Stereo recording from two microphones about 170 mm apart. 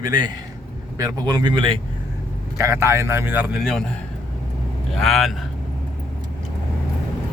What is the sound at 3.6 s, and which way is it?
Speech, 5° left (ahead or behind).